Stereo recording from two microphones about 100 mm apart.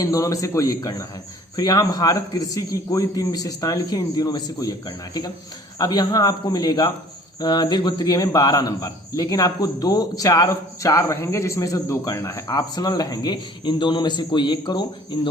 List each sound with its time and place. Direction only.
0.0 s a man's voice: 35° left (ahead or behind)